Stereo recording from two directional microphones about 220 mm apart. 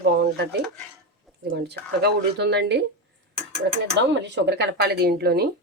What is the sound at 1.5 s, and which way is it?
Speech, 50° right (ahead or behind).